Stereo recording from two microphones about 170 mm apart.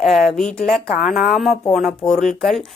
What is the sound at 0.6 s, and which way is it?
Speech, 50° left (ahead or behind).